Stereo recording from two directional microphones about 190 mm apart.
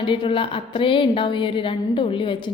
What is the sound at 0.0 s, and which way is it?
A woman's voice, 25° left (ahead or behind).